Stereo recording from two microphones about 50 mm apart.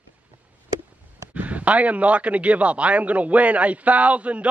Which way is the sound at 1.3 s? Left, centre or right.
Right.